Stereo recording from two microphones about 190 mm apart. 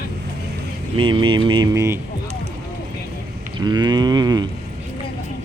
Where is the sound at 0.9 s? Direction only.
25° right (ahead or behind).